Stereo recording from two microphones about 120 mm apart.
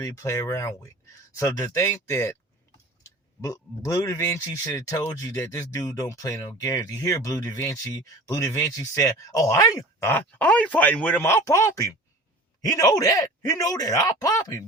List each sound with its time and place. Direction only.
0.0 s speech: 25° left (ahead or behind)